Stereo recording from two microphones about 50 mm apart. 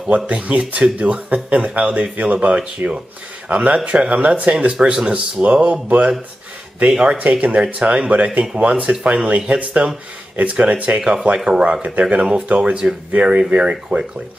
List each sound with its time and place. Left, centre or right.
0.1 s speech: right
11.0 s speech: centre